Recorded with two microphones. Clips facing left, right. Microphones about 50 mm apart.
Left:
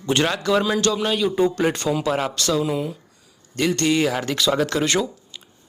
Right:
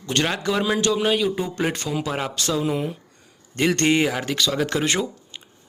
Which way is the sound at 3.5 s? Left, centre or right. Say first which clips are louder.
Right 1 dB; right.